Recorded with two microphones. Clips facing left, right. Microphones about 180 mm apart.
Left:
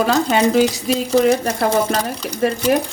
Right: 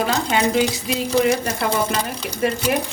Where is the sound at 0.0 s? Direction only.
45° left (ahead or behind).